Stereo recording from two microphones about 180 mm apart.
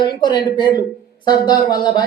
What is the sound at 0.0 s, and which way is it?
Speech, 25° left (ahead or behind).